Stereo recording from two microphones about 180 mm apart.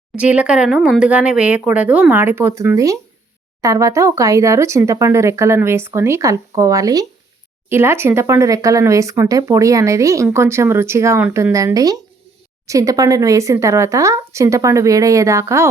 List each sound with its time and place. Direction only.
0.2 s speech: 5° right (ahead or behind)